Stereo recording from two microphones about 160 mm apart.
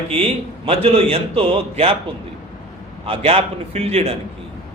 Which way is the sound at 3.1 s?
40° right (ahead or behind).